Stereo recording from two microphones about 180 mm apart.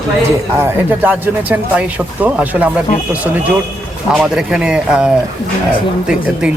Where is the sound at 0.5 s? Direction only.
10° right (ahead or behind).